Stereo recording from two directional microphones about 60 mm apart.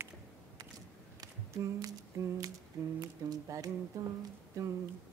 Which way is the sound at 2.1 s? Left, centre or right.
Right.